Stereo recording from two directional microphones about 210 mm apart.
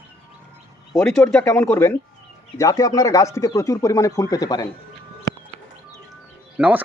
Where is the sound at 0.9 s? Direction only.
5° left (ahead or behind).